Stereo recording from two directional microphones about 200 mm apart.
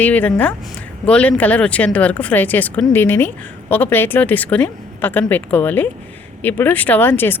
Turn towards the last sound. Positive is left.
turn(degrees=10)  # may be behind; listen again after turning